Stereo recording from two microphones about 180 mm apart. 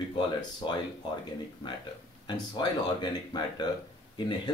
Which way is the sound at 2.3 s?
25° left (ahead or behind).